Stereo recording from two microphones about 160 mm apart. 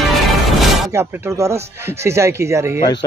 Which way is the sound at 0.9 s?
15° right (ahead or behind).